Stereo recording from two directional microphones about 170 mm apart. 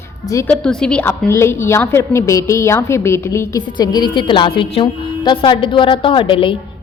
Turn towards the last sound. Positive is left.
turn(degrees=30)  # may be behind; listen again after turning